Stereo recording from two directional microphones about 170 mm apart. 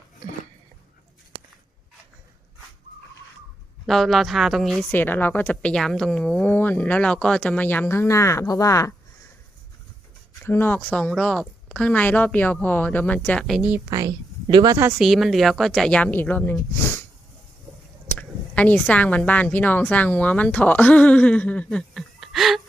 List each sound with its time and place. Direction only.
3.8 s speech: centre (ahead or behind); by 8.9 s 20° left (ahead or behind)
10.4 s speech: 15° left (ahead or behind)
13.7 s a woman's voice: 15° right (ahead or behind)
14.9 s a woman's voice: centre (ahead or behind)
16.7 s sniff: 15° left (ahead or behind)
18.2 s speech: 10° left (ahead or behind)